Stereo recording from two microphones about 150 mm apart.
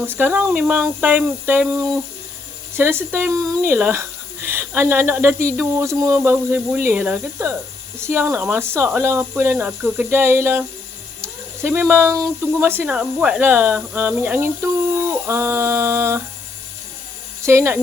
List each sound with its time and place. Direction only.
0.0 s speech: 15° right (ahead or behind)
2.7 s speech: 15° right (ahead or behind)
17.4 s speech: 20° right (ahead or behind)